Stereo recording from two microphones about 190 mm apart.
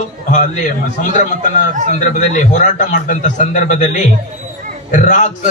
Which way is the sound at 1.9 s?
40° left (ahead or behind).